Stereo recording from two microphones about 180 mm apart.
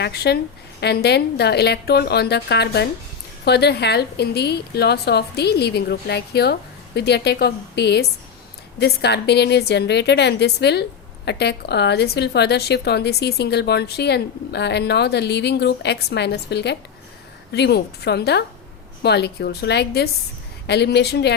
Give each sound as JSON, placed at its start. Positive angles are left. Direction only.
{"t": 0.0, "sound": "a woman's voice", "side_deg": 65}